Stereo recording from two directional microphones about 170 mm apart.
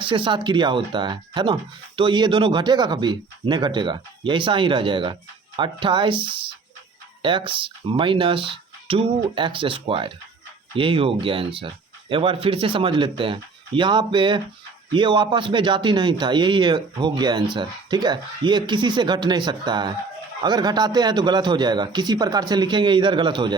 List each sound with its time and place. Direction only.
0.0 s speech: 30° right (ahead or behind)
7.2 s speech: 30° right (ahead or behind)